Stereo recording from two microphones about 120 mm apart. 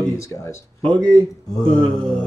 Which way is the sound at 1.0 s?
Centre (ahead or behind).